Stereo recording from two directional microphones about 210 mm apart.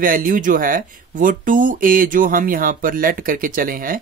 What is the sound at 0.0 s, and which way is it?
Speech, 40° right (ahead or behind).